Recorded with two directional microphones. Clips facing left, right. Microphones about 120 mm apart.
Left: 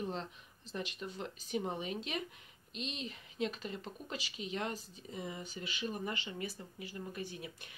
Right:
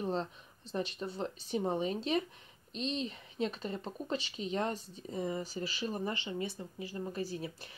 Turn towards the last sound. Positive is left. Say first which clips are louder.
# right 6 dB
turn(degrees=-35)  # may be behind; listen again after turning